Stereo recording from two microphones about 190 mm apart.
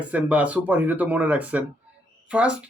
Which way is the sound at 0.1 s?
5° right (ahead or behind).